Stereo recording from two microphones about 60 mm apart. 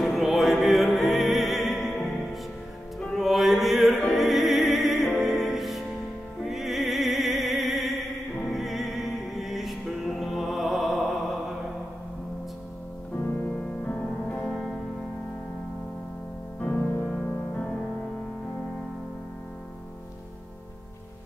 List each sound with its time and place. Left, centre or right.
0.0 s opera: centre
3.1 s opera: centre
6.4 s music: centre
13.9 s music: centre
14.4 s music: centre
16.7 s music: centre